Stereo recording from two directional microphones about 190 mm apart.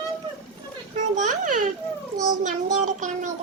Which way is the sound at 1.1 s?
40° right (ahead or behind).